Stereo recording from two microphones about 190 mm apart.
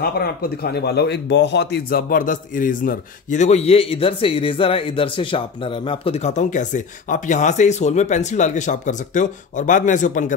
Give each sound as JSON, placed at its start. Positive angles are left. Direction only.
{"t": 0.0, "sound": "speech", "side_deg": 55}